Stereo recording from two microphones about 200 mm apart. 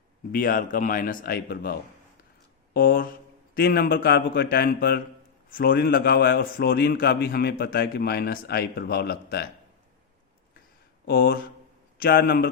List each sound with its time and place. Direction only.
0.3 s a man's voice: 45° left (ahead or behind)
11.0 s a man's voice: 45° left (ahead or behind)